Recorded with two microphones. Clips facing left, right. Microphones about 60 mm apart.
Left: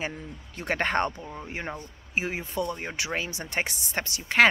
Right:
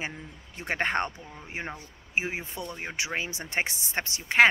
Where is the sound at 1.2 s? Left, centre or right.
Centre.